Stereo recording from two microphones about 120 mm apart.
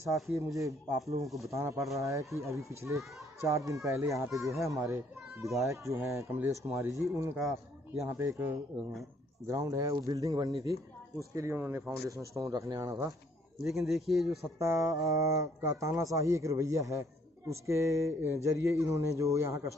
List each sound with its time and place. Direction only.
0.0 s speech: 25° right (ahead or behind)
1.2 s speech: centre (ahead or behind)
1.5 s speech: 25° right (ahead or behind)
9.5 s speech: 30° right (ahead or behind)
13.7 s speech: centre (ahead or behind)
14.6 s speech: 25° right (ahead or behind)